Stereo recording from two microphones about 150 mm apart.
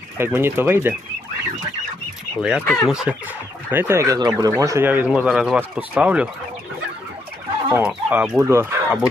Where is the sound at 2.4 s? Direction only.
5° right (ahead or behind).